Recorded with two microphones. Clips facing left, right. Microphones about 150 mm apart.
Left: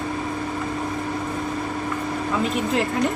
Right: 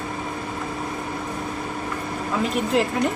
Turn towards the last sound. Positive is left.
turn(degrees=0)  # may be behind; listen again after turning